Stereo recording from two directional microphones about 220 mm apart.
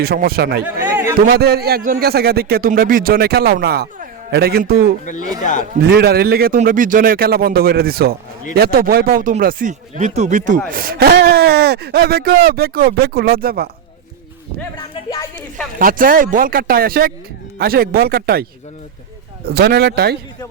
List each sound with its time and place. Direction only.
0.0 s a man's voice: 45° right (ahead or behind)
5.4 s speech: 35° left (ahead or behind)
5.7 s a man's voice: 45° right (ahead or behind)
15.8 s a man's voice: 40° right (ahead or behind)
19.5 s a man's voice: 45° right (ahead or behind)